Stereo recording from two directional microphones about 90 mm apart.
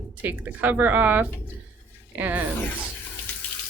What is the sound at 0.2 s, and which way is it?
Speech, 20° right (ahead or behind).